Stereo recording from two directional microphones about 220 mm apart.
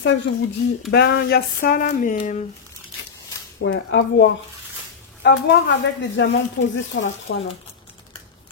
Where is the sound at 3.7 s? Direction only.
55° left (ahead or behind).